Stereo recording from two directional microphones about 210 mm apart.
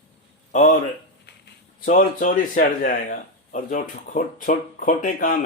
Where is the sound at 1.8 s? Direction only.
40° left (ahead or behind).